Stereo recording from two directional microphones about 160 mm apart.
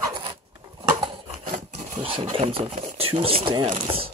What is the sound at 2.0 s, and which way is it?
Speech, 35° right (ahead or behind).